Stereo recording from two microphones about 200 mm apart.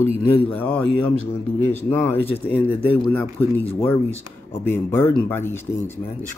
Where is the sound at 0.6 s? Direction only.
10° left (ahead or behind).